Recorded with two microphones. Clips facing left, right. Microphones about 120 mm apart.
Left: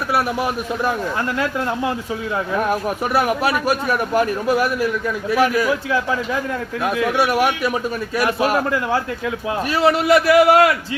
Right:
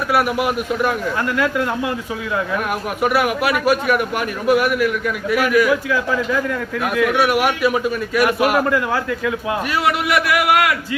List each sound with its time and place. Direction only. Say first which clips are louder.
2.6 s a man's voice: even; 35° left (ahead or behind)
8.1 s a man's voice: right 2 dB; 30° left (ahead or behind)